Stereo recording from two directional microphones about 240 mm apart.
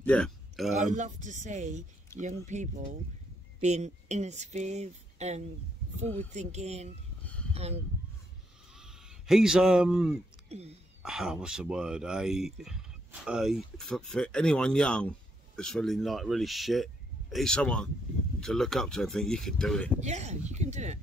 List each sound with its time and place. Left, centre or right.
0.0 s speech: centre
0.7 s speech: right
8.7 s a sound: centre
11.0 s speech: centre
20.0 s speech: right